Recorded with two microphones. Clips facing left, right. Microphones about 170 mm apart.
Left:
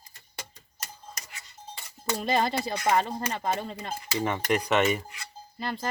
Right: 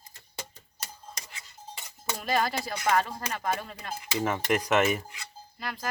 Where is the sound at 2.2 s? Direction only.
25° left (ahead or behind).